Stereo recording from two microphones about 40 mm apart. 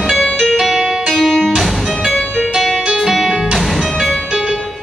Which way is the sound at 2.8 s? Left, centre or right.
Centre.